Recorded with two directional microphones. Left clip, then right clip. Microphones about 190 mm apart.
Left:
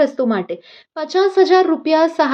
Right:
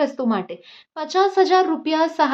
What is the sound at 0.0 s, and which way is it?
Speech, 15° left (ahead or behind).